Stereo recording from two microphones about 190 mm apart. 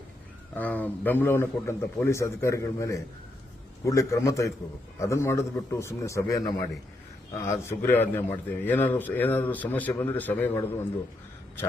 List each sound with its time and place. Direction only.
0.5 s a man's voice: 10° left (ahead or behind)